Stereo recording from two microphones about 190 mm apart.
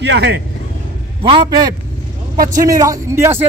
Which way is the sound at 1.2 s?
25° right (ahead or behind).